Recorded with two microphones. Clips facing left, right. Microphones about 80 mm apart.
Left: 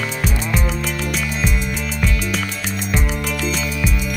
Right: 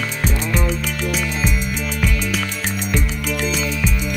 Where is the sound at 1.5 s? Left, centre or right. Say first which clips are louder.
Even; centre.